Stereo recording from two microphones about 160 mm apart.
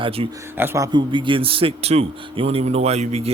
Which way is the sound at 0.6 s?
15° right (ahead or behind).